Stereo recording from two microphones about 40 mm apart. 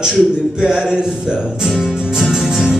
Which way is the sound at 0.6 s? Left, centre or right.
Centre.